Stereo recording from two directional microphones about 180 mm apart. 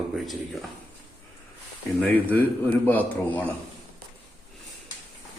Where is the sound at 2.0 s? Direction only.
10° left (ahead or behind).